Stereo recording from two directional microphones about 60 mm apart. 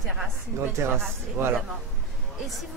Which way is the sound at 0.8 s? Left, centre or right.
Right.